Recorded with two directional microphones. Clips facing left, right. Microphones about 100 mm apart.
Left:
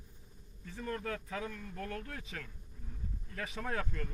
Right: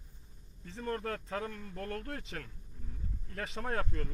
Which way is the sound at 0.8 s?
45° right (ahead or behind).